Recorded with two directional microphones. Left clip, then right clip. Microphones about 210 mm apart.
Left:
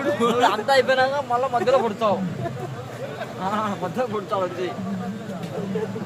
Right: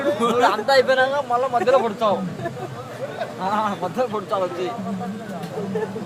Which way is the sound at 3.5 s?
10° right (ahead or behind).